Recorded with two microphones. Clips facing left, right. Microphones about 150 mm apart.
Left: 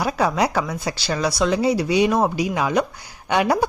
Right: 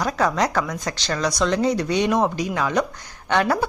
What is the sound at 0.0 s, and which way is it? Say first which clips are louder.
A woman's voice: left 1 dB; 10° left (ahead or behind).